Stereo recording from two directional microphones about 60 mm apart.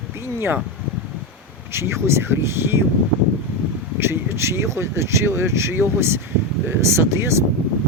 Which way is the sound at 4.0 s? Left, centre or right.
Right.